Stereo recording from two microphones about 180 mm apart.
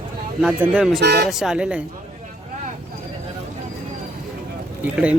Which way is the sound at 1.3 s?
Centre (ahead or behind).